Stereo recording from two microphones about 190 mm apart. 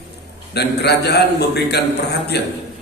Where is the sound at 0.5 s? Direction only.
60° left (ahead or behind).